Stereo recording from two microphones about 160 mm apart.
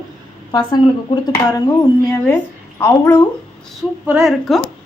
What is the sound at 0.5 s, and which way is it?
A woman's voice, 30° left (ahead or behind).